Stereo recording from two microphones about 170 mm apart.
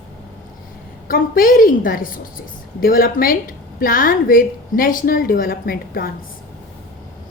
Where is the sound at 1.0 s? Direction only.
55° left (ahead or behind).